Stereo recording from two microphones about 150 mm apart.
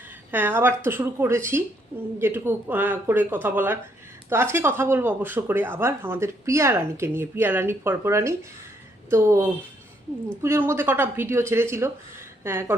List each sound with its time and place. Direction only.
0.3 s speech: 15° right (ahead or behind)